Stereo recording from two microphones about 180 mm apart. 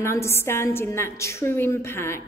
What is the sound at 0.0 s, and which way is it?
A woman's voice, 15° left (ahead or behind).